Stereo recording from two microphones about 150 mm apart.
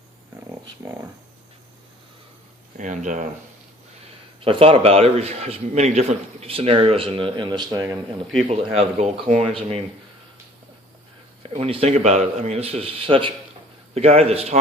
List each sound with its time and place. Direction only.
0.6 s speech: 20° right (ahead or behind)
2.7 s speech: 55° right (ahead or behind)
4.4 s a man's voice: 35° right (ahead or behind)
8.4 s speech: 45° right (ahead or behind)
11.4 s speech: 40° right (ahead or behind)